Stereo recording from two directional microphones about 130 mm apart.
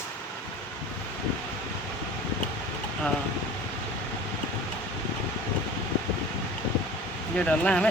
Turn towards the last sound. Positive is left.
turn(degrees=10)  # may be behind; listen again after turning